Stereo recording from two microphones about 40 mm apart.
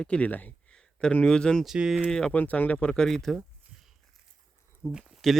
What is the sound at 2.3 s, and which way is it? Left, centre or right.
Speech, left.